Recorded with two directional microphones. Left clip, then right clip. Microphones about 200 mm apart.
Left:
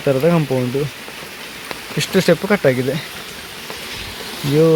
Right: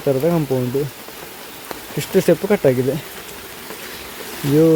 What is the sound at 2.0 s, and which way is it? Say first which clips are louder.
Speech: even; 20° right (ahead or behind).